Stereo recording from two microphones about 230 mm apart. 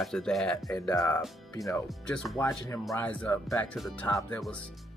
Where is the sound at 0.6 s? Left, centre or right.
Centre.